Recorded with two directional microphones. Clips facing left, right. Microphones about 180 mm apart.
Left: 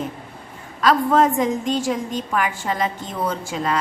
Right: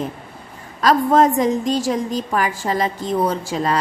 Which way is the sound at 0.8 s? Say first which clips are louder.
Right 2 dB; 40° right (ahead or behind).